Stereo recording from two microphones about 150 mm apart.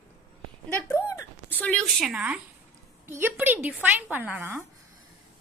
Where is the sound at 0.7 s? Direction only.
15° left (ahead or behind); by 4.6 s 10° right (ahead or behind).